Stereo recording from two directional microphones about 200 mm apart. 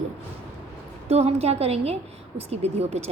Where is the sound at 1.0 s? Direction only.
30° right (ahead or behind).